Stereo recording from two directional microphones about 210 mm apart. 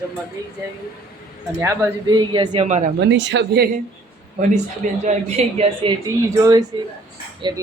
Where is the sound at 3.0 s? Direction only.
55° right (ahead or behind).